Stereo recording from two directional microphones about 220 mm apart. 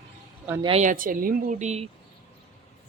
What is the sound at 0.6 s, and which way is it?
Speech, 30° right (ahead or behind).